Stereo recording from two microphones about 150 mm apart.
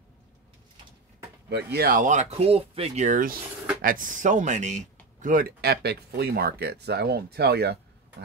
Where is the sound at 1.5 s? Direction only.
90° right.